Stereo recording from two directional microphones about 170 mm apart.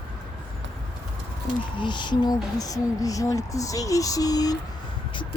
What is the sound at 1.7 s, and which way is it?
Speech, 25° left (ahead or behind).